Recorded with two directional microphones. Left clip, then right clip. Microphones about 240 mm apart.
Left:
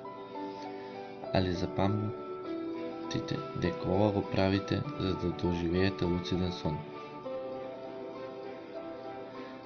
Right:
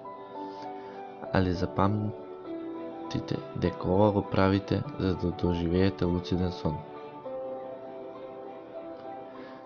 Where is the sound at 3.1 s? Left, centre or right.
Right.